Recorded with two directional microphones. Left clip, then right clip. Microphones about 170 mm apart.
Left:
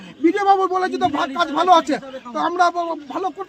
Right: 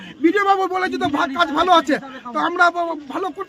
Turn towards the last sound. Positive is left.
turn(degrees=-10)  # may be behind; listen again after turning